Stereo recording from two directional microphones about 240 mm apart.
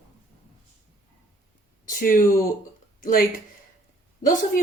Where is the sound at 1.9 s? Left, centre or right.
Left.